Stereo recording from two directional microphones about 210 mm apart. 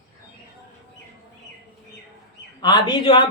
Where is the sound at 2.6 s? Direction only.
20° left (ahead or behind).